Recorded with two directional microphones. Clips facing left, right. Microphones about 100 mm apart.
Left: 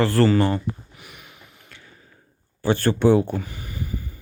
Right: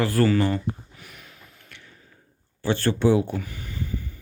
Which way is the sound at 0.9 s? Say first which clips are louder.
Left 1 dB; 10° left (ahead or behind).